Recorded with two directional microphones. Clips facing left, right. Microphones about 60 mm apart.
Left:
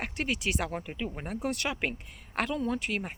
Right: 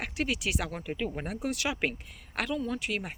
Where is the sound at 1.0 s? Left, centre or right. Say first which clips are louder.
Right 2 dB; centre.